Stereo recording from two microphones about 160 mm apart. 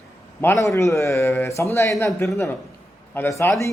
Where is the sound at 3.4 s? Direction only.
15° left (ahead or behind).